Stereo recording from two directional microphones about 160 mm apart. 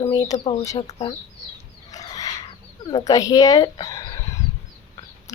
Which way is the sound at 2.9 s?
20° left (ahead or behind).